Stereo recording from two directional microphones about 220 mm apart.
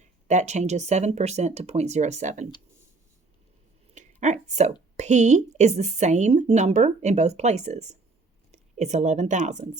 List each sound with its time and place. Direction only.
0.0 s speech: 30° right (ahead or behind)
4.2 s a woman's voice: 30° right (ahead or behind)